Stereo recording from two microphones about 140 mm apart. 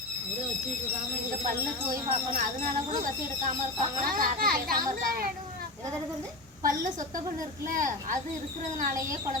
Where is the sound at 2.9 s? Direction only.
70° right (ahead or behind).